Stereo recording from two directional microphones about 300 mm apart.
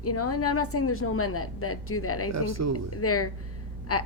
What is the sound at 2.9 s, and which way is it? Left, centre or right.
Speech, left.